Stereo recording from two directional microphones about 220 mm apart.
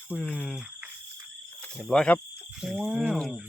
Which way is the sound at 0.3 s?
5° right (ahead or behind).